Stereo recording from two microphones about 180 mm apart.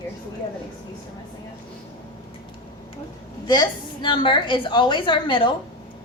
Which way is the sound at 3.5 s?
25° left (ahead or behind).